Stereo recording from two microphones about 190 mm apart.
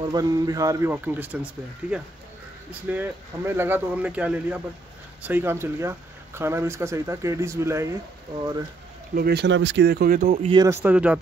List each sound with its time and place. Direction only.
0.0 s speech: 20° right (ahead or behind)
9.1 s speech: 55° right (ahead or behind)
10.5 s speech: 15° right (ahead or behind)